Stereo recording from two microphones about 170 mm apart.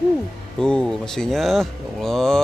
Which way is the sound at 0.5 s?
5° left (ahead or behind).